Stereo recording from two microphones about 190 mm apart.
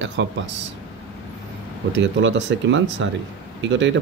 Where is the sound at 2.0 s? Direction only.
75° right (ahead or behind).